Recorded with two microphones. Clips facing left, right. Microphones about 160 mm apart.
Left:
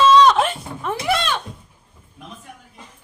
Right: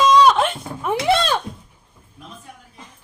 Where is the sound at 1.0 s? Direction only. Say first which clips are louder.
Right 3 dB; 35° right (ahead or behind).